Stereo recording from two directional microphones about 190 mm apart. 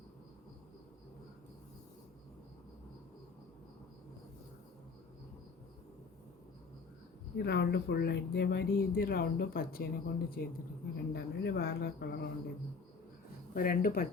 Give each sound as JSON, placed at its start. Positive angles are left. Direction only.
{"t": 7.3, "sound": "speech", "side_deg": 60}
{"t": 13.5, "sound": "speech", "side_deg": 50}